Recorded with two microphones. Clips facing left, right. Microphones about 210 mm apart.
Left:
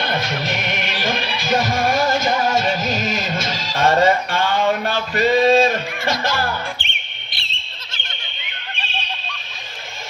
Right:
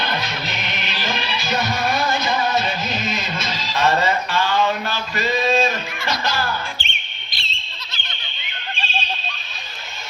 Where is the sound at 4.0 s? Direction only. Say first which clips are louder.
Left 4 dB; 50° left (ahead or behind).